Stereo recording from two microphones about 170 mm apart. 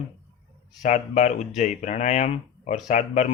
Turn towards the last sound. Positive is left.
turn(degrees=45)  # may be behind; listen again after turning